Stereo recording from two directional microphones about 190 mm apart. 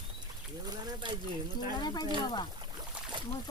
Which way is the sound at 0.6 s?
25° right (ahead or behind).